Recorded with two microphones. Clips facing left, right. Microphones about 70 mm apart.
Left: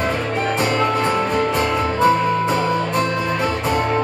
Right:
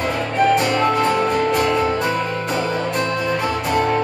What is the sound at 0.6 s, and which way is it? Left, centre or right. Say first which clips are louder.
Music: right 1 dB; left.